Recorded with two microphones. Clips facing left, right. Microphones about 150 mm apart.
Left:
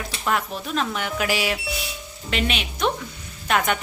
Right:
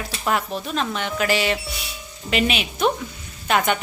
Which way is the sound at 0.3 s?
Centre (ahead or behind).